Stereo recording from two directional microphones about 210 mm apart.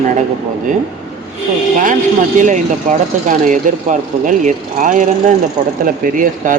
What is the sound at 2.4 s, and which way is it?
Speech, 35° right (ahead or behind).